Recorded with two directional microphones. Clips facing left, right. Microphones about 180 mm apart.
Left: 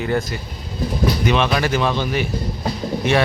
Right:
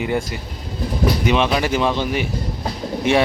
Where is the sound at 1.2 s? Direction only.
15° right (ahead or behind).